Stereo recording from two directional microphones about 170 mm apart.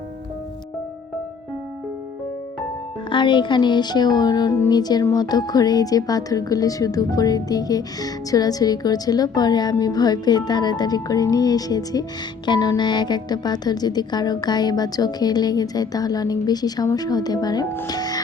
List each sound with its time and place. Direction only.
3.1 s speech: 30° left (ahead or behind)